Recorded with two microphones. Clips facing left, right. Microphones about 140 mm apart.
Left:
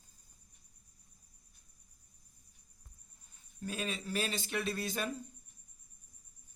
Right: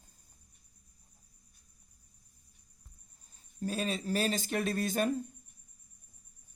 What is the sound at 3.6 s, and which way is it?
Speech, 35° right (ahead or behind).